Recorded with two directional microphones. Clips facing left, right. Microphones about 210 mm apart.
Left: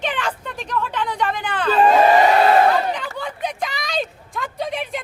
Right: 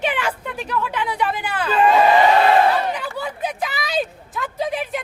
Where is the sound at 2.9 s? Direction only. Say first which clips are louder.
Right 1 dB; 5° right (ahead or behind).